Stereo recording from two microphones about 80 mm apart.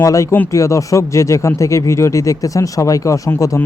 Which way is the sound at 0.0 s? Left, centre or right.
Left.